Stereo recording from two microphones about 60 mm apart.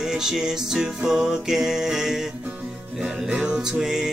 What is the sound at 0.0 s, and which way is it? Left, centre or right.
Music, centre.